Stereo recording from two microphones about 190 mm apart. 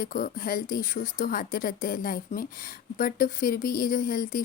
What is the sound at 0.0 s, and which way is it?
Speech, 45° left (ahead or behind).